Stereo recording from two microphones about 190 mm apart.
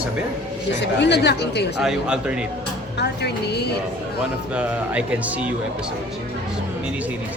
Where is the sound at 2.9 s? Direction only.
60° left (ahead or behind).